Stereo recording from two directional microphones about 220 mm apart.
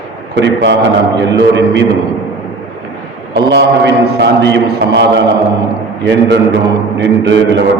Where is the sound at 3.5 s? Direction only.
50° right (ahead or behind).